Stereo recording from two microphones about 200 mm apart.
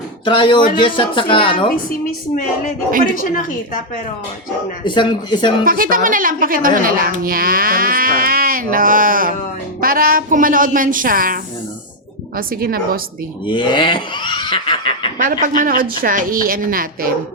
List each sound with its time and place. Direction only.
0.3 s speech: 25° left (ahead or behind)
4.9 s speech: 25° left (ahead or behind)
5.6 s speech: 45° right (ahead or behind)
12.4 s speech: 45° right (ahead or behind)
13.4 s speech: 25° left (ahead or behind)
15.2 s speech: 45° right (ahead or behind)